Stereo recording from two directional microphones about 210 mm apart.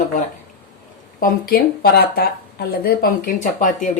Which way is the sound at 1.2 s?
45° left (ahead or behind).